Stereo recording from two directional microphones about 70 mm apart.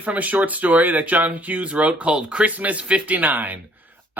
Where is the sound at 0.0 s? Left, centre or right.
Right.